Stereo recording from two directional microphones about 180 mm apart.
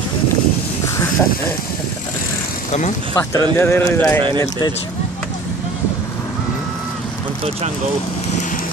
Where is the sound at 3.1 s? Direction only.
15° left (ahead or behind).